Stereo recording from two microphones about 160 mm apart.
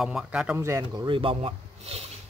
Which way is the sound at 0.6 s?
20° right (ahead or behind).